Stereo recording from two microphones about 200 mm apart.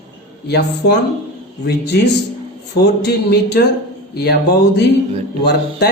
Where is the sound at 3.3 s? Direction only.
55° left (ahead or behind).